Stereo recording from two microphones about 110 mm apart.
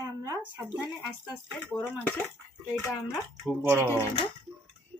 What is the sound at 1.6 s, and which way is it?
Speech, 15° left (ahead or behind).